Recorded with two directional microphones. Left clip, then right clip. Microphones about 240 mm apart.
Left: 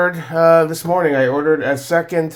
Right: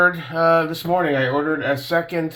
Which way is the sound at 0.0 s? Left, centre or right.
Left.